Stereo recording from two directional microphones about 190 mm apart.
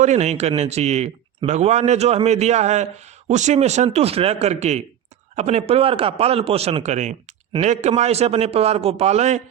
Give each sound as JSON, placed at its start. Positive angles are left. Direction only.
{"t": 0.0, "sound": "speech", "side_deg": -35}